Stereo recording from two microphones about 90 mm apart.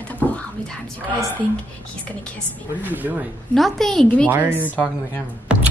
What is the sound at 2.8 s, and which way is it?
Speech, 20° right (ahead or behind).